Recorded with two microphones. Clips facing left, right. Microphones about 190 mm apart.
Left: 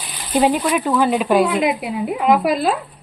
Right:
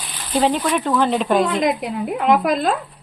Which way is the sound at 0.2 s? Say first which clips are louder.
Left 2 dB; 15° left (ahead or behind).